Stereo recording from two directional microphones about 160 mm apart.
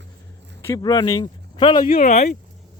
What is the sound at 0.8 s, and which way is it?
Speech, 25° left (ahead or behind).